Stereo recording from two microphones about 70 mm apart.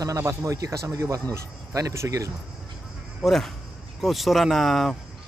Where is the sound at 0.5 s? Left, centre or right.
Right.